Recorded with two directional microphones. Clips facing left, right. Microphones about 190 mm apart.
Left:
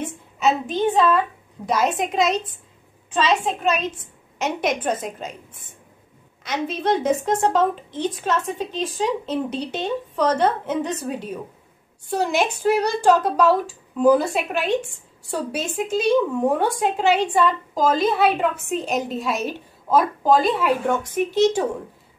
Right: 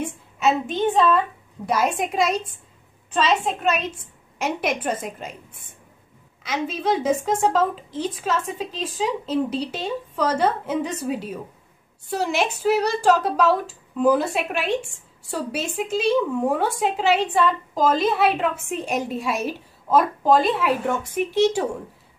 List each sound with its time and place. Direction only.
0.0 s a woman's voice: centre (ahead or behind)
6.4 s a woman's voice: 5° right (ahead or behind)